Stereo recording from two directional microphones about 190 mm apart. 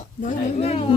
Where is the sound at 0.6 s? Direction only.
35° left (ahead or behind).